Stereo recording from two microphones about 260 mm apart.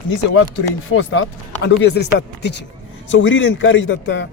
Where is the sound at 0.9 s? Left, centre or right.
Left.